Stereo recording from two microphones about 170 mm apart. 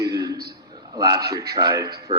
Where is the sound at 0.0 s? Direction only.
20° right (ahead or behind).